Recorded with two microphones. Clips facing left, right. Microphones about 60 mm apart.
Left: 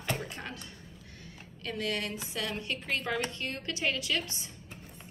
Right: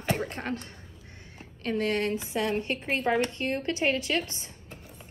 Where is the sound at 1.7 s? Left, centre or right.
Right.